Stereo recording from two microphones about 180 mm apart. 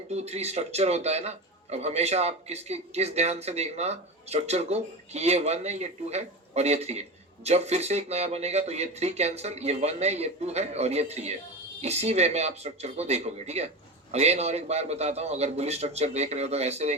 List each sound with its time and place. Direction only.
0.1 s a man's voice: 35° right (ahead or behind)